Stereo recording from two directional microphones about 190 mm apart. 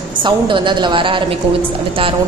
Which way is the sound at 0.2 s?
25° right (ahead or behind).